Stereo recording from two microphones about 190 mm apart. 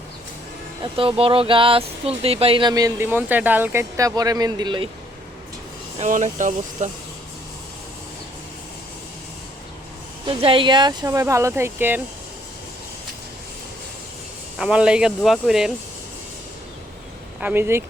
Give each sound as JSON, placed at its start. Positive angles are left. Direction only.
{"t": 0.8, "sound": "speech", "side_deg": -30}
{"t": 6.0, "sound": "speech", "side_deg": -40}
{"t": 10.2, "sound": "speech", "side_deg": -25}
{"t": 14.6, "sound": "speech", "side_deg": -5}
{"t": 17.4, "sound": "speech", "side_deg": -10}